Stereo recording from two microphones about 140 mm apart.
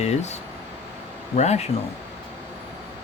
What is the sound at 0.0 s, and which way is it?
Speech, 55° left (ahead or behind).